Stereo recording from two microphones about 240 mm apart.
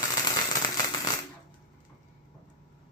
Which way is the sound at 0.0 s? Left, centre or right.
Centre.